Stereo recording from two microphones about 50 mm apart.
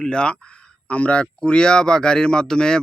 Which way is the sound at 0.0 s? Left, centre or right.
Centre.